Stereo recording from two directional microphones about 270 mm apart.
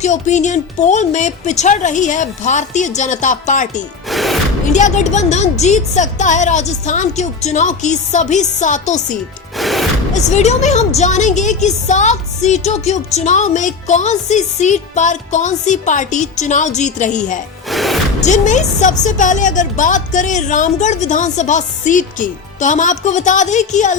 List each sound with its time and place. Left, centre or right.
0.0 s a woman's voice: left
4.1 s music: centre
4.7 s a woman's voice: left
9.6 s music: centre
10.2 s a woman's voice: left
17.7 s music: centre
18.2 s a woman's voice: left